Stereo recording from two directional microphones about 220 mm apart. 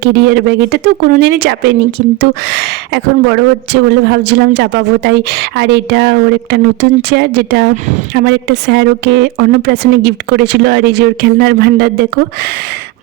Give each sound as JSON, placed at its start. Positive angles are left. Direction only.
{"t": 0.0, "sound": "speech", "side_deg": -50}